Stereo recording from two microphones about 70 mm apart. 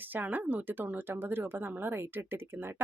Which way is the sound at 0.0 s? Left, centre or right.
Right.